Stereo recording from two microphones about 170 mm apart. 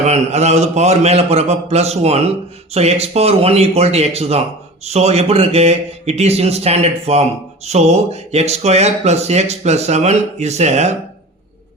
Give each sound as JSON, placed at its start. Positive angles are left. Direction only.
{"t": 0.0, "sound": "speech", "side_deg": -40}